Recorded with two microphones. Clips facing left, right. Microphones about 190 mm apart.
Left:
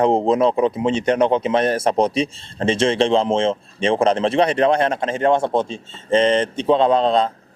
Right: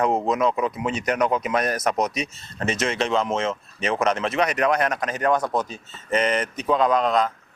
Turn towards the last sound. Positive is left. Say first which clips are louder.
# left 4 dB
turn(degrees=30)  # may be behind; listen again after turning